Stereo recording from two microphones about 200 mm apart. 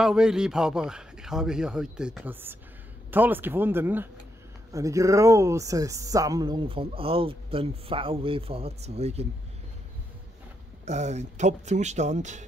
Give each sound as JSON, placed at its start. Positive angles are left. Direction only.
{"t": 0.0, "sound": "speech", "side_deg": -5}
{"t": 10.9, "sound": "speech", "side_deg": -35}